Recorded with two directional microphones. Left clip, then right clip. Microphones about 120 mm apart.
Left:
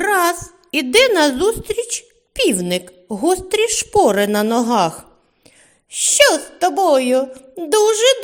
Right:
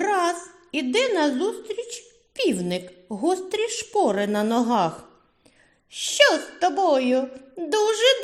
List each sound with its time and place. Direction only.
0.0 s a woman's voice: 45° left (ahead or behind); by 8.2 s 30° left (ahead or behind)